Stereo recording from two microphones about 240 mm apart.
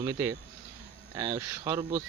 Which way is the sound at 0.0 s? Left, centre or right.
Centre.